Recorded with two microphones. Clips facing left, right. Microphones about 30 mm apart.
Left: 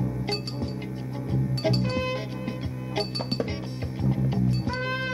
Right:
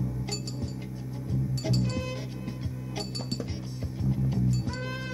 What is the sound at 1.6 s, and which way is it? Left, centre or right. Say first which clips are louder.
Music: left 6 dB; left.